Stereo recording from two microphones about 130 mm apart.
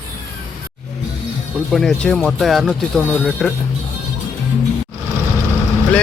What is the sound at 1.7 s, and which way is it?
Speech, 5° left (ahead or behind).